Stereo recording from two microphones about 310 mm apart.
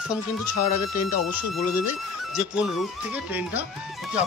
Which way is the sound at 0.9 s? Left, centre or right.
Left.